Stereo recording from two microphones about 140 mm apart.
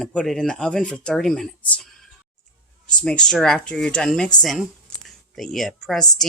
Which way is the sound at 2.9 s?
5° left (ahead or behind).